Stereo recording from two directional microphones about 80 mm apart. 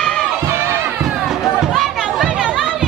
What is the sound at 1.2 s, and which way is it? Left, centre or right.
Chatter, centre.